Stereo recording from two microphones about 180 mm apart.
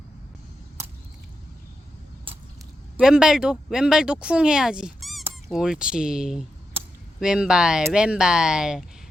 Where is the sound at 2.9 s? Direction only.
5° right (ahead or behind).